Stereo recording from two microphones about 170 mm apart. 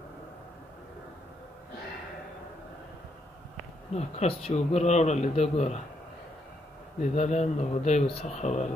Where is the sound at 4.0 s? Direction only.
40° left (ahead or behind).